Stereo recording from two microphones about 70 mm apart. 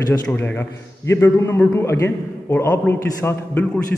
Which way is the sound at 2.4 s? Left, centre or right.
Left.